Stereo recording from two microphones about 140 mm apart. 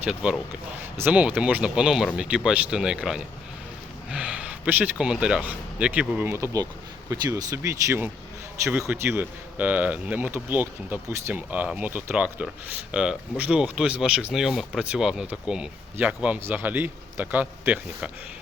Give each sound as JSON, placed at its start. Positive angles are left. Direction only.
{"t": 0.1, "sound": "speech", "side_deg": -5}